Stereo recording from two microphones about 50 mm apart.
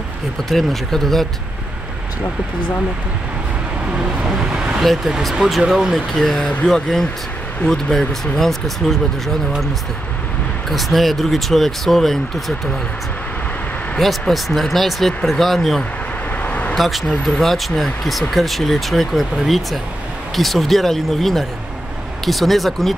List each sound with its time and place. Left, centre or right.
0.5 s speech: centre
3.9 s speech: centre
4.7 s speech: centre
10.7 s speech: centre
13.9 s speech: centre
16.4 s vehicle: left
16.7 s speech: centre